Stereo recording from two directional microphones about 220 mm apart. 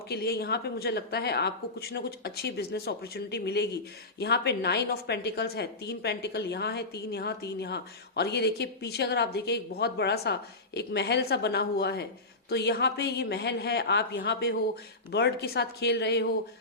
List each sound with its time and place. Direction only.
0.1 s a woman's voice: 45° left (ahead or behind)